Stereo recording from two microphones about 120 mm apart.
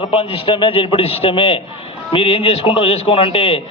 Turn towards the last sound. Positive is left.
turn(degrees=50)  # may be behind; listen again after turning